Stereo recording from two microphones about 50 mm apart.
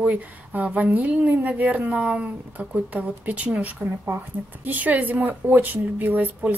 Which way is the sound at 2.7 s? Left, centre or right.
Right.